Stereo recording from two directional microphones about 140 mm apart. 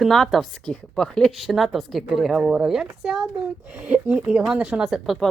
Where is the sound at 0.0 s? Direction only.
Centre (ahead or behind).